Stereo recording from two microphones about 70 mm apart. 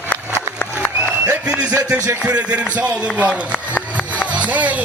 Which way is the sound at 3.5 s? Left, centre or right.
Left.